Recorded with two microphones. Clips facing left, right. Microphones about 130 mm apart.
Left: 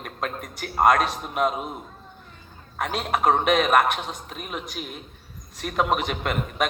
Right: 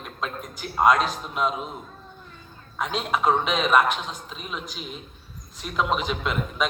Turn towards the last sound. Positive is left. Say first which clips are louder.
# left 1 dB
turn(degrees=55)  # may be behind; listen again after turning